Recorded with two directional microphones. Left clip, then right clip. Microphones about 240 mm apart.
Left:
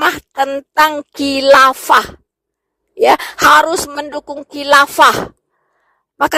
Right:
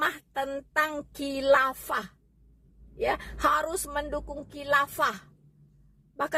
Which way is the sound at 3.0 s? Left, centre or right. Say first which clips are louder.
Left 17 dB; left.